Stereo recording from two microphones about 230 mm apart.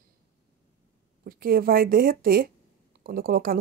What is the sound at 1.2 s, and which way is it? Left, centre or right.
Speech, right.